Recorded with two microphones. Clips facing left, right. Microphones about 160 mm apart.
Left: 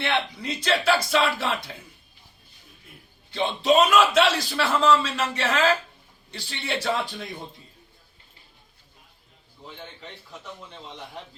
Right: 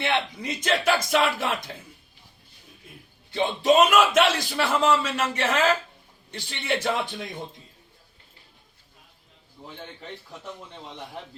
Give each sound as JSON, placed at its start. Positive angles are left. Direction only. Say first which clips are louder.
{"t": 0.0, "sound": "speech", "louder": "even", "side_deg": -15}
{"t": 3.3, "sound": "a man's voice", "louder": "right 1 dB", "side_deg": -15}